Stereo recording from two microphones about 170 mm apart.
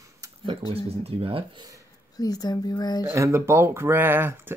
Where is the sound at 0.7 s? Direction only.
35° right (ahead or behind).